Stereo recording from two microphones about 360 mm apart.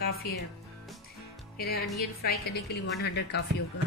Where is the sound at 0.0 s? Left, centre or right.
Left.